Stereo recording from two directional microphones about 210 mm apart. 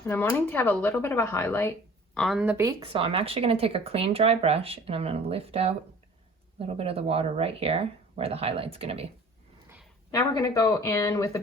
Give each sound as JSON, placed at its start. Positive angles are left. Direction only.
{"t": 0.0, "sound": "speech", "side_deg": 10}
{"t": 2.8, "sound": "speech", "side_deg": -25}
{"t": 10.1, "sound": "speech", "side_deg": 15}